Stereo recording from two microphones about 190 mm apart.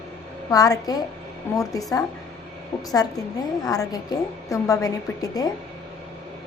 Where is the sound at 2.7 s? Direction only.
30° left (ahead or behind).